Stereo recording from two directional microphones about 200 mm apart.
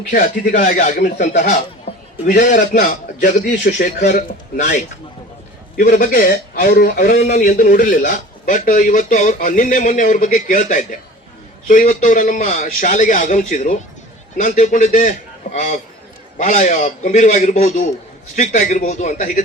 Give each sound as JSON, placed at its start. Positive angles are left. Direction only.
{"t": 0.1, "sound": "a man's voice", "side_deg": 45}